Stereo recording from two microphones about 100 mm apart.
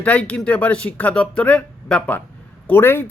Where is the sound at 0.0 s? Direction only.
15° left (ahead or behind).